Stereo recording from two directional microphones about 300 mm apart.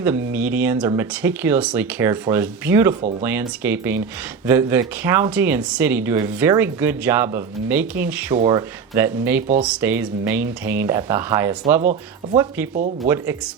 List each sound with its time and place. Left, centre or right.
0.3 s speech: centre
11.8 s speech: right